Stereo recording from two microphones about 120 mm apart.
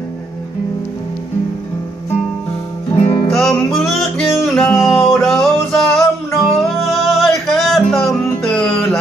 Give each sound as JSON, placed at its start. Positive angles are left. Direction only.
{"t": 2.9, "sound": "music", "side_deg": 50}
{"t": 3.3, "sound": "music", "side_deg": 0}
{"t": 4.7, "sound": "music", "side_deg": 25}
{"t": 5.2, "sound": "music", "side_deg": 5}